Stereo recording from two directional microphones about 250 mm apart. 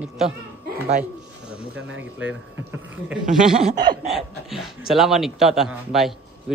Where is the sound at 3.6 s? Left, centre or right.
Centre.